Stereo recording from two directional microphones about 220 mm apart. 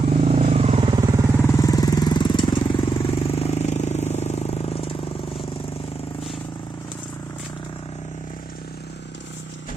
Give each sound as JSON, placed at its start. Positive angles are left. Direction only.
{"t": 0.2, "sound": "vehicle", "side_deg": -25}
{"t": 1.5, "sound": "vehicle", "side_deg": 15}